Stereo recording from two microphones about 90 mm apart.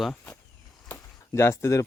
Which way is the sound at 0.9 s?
30° left (ahead or behind).